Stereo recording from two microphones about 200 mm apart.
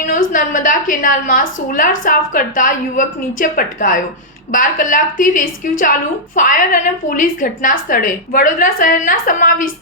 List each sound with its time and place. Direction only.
0.3 s a woman's voice: 40° left (ahead or behind)